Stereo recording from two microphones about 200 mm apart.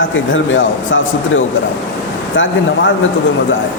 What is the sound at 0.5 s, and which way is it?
Speech, 70° left (ahead or behind).